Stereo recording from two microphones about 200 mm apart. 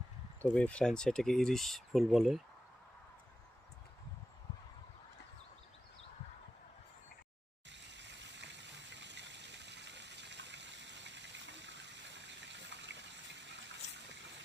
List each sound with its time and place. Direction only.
0.5 s speech: 5° left (ahead or behind)
7.7 s stream: 60° right (ahead or behind)